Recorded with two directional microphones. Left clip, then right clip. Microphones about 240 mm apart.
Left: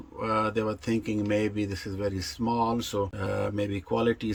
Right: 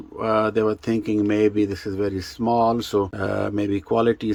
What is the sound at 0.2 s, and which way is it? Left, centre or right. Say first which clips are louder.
Speech: right 7 dB; centre.